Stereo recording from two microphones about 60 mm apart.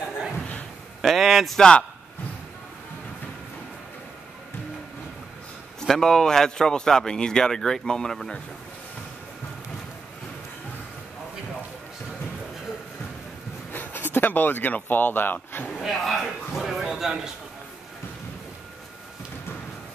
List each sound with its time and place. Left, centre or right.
1.0 s a man's voice: centre
1.6 s a man's voice: centre
5.8 s a man's voice: centre
13.7 s speech: left
15.8 s a man's voice: centre